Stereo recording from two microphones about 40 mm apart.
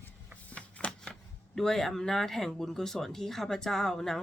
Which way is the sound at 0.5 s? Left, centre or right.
Left.